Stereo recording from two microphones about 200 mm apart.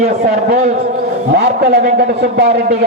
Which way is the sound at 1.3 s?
50° right (ahead or behind).